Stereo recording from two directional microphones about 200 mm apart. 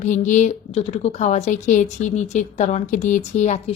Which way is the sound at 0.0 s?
40° left (ahead or behind).